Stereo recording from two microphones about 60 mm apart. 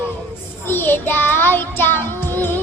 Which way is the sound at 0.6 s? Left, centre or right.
Left.